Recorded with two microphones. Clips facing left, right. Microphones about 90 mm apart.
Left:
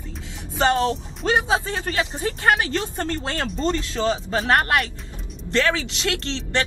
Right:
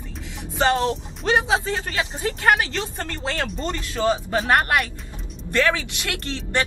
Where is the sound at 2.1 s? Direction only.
25° left (ahead or behind).